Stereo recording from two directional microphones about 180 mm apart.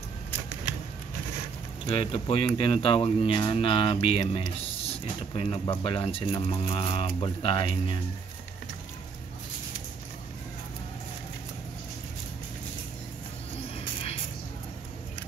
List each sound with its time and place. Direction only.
1.9 s speech: 30° left (ahead or behind)